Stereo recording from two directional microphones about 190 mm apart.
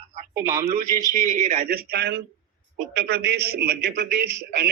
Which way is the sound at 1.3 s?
40° right (ahead or behind).